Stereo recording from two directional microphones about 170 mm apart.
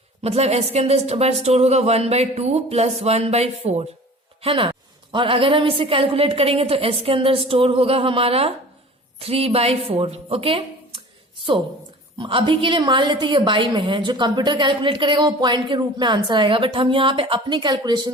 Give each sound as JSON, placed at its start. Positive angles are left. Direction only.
{"t": 0.2, "sound": "a woman's voice", "side_deg": -35}
{"t": 12.1, "sound": "a woman's voice", "side_deg": -30}